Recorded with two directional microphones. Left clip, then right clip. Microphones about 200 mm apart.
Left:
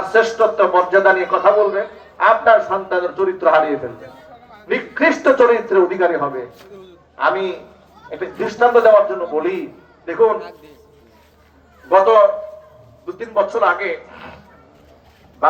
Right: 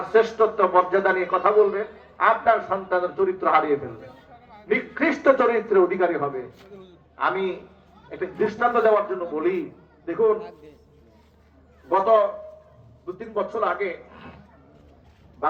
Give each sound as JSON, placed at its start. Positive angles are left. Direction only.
{"t": 0.1, "sound": "a man's voice", "side_deg": 20}
{"t": 4.7, "sound": "a man's voice", "side_deg": 25}
{"t": 11.9, "sound": "a man's voice", "side_deg": 25}